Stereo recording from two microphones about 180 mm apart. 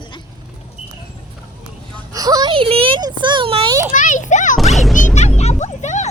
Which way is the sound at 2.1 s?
20° right (ahead or behind).